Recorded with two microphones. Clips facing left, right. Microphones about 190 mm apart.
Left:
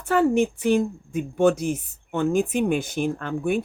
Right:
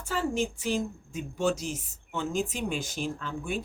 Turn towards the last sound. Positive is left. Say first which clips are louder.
# left 9 dB
turn(degrees=60)  # may be behind; listen again after turning